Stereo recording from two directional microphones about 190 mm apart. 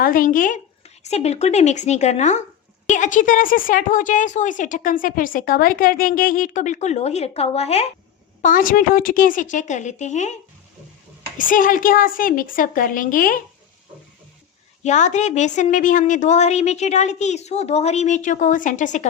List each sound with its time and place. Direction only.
0.0 s a woman's voice: 45° left (ahead or behind)
1.0 s a woman's voice: 35° left (ahead or behind)
8.4 s a woman's voice: 45° left (ahead or behind)
11.3 s a woman's voice: 45° left (ahead or behind)
14.8 s a woman's voice: 40° left (ahead or behind)